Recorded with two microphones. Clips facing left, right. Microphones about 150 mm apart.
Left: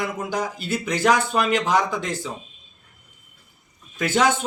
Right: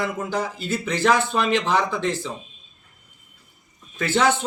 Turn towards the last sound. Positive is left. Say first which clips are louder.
# even
turn(degrees=10)  # may be behind; listen again after turning